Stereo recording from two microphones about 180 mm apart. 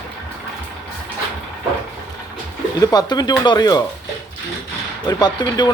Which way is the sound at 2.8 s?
20° left (ahead or behind).